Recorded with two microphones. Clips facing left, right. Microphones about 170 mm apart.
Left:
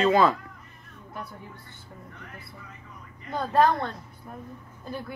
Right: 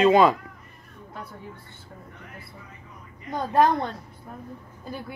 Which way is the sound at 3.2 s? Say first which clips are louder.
Right 1 dB; 15° right (ahead or behind).